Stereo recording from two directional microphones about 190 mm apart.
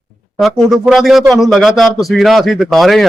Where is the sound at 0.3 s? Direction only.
Centre (ahead or behind).